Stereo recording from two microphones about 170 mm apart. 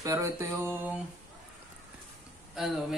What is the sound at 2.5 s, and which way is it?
Speech, centre (ahead or behind).